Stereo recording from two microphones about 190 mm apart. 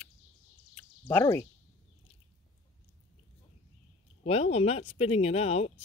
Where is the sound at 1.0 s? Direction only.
15° left (ahead or behind).